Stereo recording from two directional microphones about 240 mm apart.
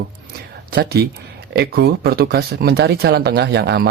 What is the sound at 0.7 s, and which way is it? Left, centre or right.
Speech, right.